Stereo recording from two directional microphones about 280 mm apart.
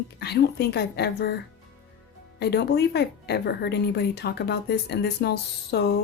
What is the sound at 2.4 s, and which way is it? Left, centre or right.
A woman's voice, left.